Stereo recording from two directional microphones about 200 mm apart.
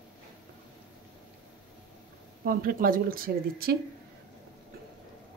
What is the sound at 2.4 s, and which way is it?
Speech, 45° right (ahead or behind).